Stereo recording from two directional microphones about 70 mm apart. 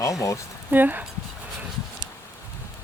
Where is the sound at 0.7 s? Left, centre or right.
Right.